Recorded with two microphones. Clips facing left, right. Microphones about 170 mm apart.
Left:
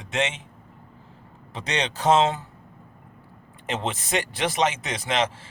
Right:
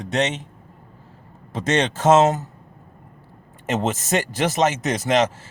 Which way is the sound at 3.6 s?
45° right (ahead or behind).